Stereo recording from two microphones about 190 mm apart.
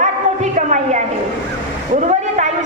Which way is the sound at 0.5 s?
40° right (ahead or behind).